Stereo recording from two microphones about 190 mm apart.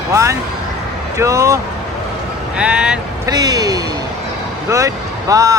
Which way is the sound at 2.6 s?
5° right (ahead or behind).